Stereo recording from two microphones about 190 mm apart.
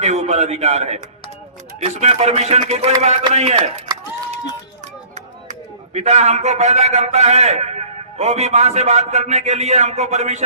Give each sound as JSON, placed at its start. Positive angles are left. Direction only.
{"t": 0.0, "sound": "speech", "side_deg": -35}
{"t": 5.1, "sound": "a man's voice", "side_deg": -35}